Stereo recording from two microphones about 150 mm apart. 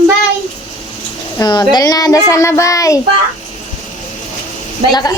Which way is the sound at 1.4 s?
25° left (ahead or behind).